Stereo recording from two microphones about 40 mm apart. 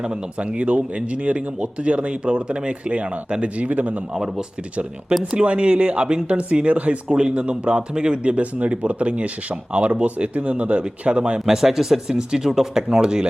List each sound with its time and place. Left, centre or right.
0.3 s speech: right
4.1 s speech: centre
5.1 s speech: right
11.3 s speech: centre